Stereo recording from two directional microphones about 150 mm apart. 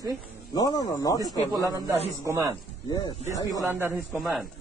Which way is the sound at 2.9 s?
30° left (ahead or behind).